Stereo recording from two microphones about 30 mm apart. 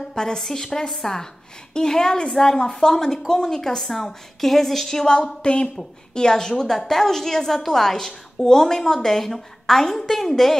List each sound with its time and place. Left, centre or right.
0.1 s a woman's voice: left
5.4 s a woman's voice: left
6.1 s a woman's voice: centre